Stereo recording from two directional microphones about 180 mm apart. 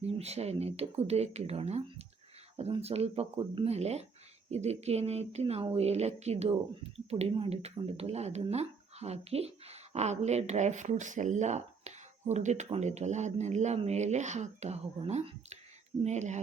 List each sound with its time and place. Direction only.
0.0 s speech: 35° right (ahead or behind)